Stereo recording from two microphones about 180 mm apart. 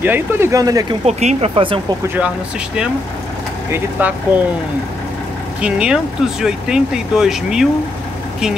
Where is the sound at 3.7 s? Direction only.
10° right (ahead or behind).